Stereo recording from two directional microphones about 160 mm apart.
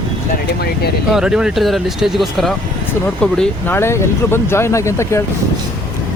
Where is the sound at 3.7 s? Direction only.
15° left (ahead or behind).